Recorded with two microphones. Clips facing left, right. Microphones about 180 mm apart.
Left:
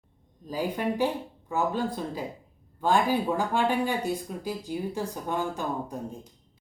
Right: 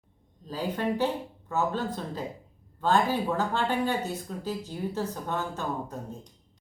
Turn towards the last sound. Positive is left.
turn(degrees=10)  # may be behind; listen again after turning